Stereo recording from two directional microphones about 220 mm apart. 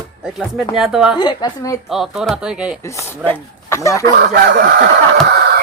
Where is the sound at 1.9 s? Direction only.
Centre (ahead or behind).